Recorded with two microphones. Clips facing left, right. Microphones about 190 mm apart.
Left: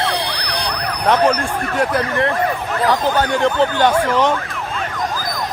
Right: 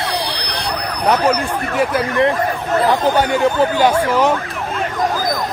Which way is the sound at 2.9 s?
15° right (ahead or behind).